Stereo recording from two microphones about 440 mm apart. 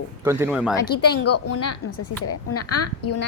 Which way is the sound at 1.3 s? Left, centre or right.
Left.